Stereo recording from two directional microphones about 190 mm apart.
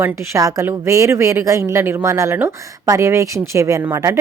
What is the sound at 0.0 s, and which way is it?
A woman's voice, 15° right (ahead or behind).